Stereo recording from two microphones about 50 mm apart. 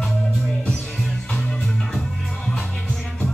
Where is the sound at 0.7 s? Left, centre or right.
Centre.